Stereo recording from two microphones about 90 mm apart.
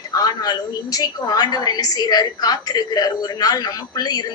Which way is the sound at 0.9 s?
45° left (ahead or behind).